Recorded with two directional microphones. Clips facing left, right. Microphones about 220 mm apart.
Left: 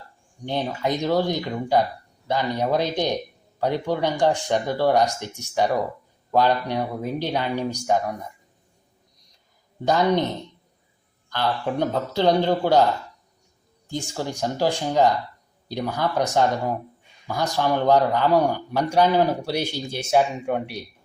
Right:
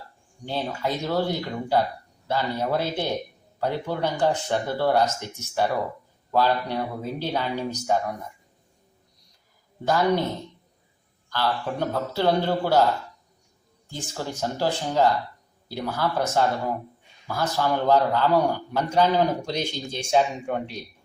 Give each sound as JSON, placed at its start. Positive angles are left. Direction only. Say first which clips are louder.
{"t": 0.4, "sound": "a man's voice", "louder": "left 3 dB", "side_deg": 20}
{"t": 9.8, "sound": "speech", "louder": "left 2 dB", "side_deg": 20}
{"t": 11.3, "sound": "a man's voice", "louder": "left 2 dB", "side_deg": 15}
{"t": 13.9, "sound": "a man's voice", "louder": "left 4 dB", "side_deg": 15}